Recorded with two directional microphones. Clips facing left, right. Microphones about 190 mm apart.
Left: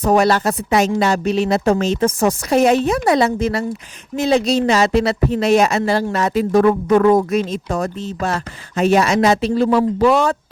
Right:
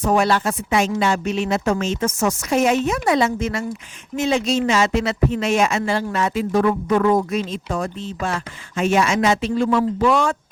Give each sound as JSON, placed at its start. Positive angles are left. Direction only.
{"t": 0.0, "sound": "speech", "side_deg": 40}